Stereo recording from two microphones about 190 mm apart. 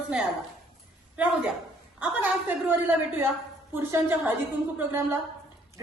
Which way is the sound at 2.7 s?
10° right (ahead or behind).